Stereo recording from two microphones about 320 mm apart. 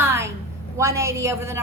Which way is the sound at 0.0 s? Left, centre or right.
Centre.